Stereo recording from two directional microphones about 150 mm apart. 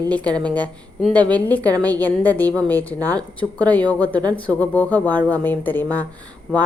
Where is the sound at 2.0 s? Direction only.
10° left (ahead or behind).